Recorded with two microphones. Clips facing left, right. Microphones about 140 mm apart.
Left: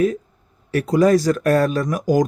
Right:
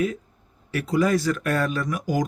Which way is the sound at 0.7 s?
40° left (ahead or behind).